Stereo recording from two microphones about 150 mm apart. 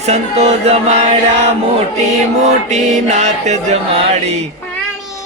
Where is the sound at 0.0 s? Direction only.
45° right (ahead or behind).